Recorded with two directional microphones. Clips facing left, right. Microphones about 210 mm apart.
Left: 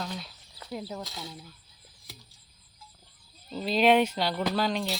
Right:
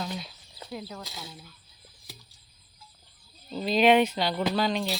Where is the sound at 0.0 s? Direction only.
10° right (ahead or behind).